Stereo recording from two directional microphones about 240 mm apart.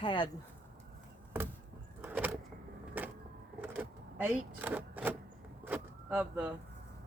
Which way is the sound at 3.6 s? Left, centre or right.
Centre.